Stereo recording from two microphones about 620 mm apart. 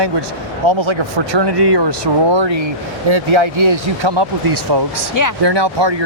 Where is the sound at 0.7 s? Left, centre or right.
Right.